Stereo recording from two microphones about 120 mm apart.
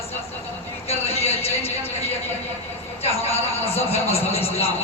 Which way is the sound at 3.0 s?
60° left (ahead or behind).